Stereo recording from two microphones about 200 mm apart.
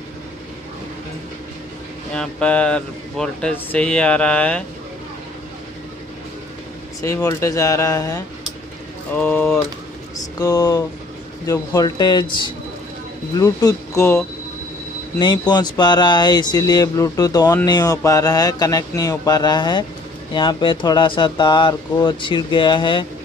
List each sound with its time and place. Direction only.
2.1 s speech: 5° left (ahead or behind)
7.0 s speech: 15° left (ahead or behind)
10.4 s speech: 20° left (ahead or behind)